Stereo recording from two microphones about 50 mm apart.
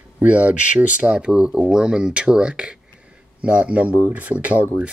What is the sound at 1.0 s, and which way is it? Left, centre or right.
Speech, centre.